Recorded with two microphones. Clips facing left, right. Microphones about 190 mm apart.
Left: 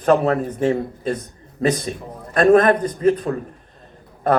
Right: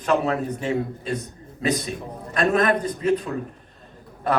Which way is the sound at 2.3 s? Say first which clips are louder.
Left 7 dB; 50° left (ahead or behind).